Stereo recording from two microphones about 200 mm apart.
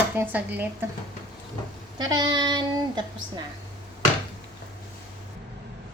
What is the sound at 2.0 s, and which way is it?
Child singing, 20° right (ahead or behind).